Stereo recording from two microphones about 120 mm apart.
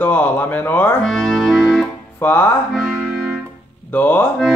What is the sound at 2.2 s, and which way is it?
Speech, 15° left (ahead or behind).